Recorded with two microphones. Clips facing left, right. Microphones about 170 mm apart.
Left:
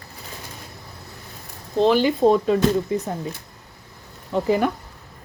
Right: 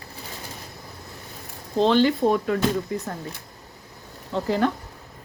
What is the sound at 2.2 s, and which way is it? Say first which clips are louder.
Speech: left 4 dB; 25° left (ahead or behind).